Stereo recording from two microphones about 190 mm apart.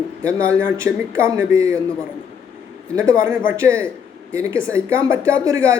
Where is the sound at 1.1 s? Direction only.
15° right (ahead or behind).